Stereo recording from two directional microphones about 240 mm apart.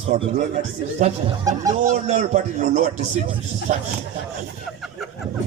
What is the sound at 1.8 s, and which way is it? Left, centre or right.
A man's voice, right.